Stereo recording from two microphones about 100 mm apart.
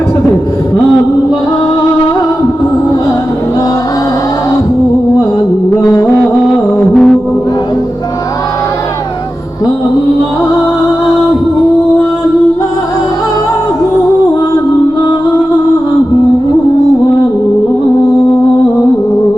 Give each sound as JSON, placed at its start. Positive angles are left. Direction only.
{"t": 5.8, "sound": "music", "side_deg": 40}
{"t": 6.9, "sound": "music", "side_deg": 10}